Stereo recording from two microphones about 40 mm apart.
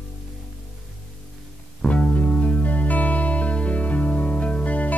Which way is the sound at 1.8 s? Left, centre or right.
Left.